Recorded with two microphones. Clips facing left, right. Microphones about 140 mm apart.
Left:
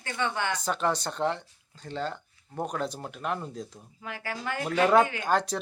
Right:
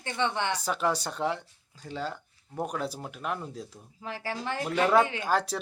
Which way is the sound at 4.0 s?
30° right (ahead or behind).